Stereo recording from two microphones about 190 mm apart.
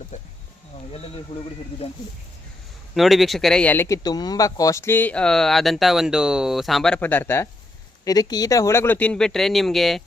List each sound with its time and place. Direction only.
1.3 s speech: 25° left (ahead or behind)
2.9 s speech: centre (ahead or behind)